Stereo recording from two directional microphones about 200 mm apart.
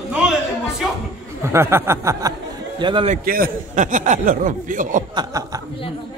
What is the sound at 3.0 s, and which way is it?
A man's voice, 45° right (ahead or behind).